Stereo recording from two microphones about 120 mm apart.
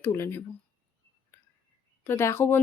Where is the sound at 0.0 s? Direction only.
20° left (ahead or behind).